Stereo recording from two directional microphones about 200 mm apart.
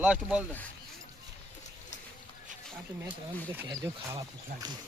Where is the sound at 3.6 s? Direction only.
20° right (ahead or behind).